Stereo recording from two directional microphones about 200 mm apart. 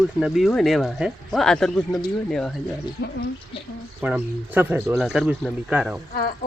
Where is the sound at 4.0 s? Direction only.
5° right (ahead or behind).